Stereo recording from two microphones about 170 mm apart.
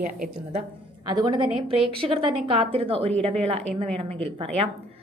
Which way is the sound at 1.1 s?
25° right (ahead or behind).